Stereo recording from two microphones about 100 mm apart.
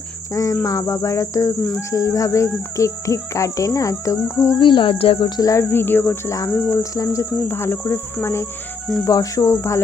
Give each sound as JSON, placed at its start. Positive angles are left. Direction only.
{"t": 0.3, "sound": "speech", "side_deg": 35}
{"t": 4.6, "sound": "cricket", "side_deg": 55}
{"t": 5.4, "sound": "speech", "side_deg": 30}
{"t": 6.9, "sound": "speech", "side_deg": 30}